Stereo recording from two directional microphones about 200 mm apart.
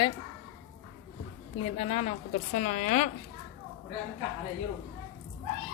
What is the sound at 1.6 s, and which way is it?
A woman's voice, 30° left (ahead or behind).